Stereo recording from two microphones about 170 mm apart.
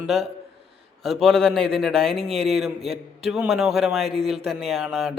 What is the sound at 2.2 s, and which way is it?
Speech, 35° right (ahead or behind).